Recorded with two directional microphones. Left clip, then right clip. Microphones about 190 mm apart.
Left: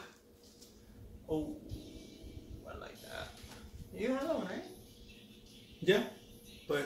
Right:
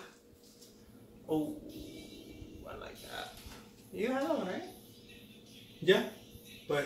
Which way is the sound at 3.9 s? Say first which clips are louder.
Right 3 dB; 5° right (ahead or behind).